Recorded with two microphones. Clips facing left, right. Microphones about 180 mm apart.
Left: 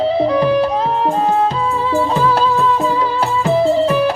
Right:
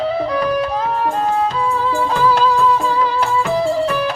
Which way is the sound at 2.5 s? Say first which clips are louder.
Even; 20° left (ahead or behind).